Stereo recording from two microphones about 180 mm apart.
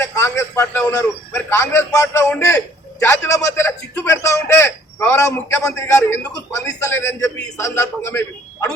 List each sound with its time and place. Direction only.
0.0 s a man's voice: 15° left (ahead or behind)